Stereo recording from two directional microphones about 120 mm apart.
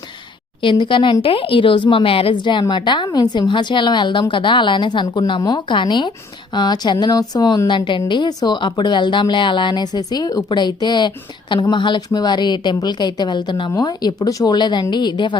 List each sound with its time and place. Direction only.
0.6 s a woman's voice: 40° left (ahead or behind)